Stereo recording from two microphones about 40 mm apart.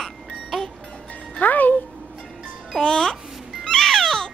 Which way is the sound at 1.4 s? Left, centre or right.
Left.